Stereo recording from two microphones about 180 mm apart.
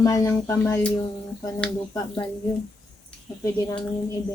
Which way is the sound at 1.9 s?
20° left (ahead or behind).